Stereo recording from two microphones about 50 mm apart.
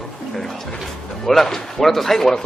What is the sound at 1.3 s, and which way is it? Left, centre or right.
Speech, centre.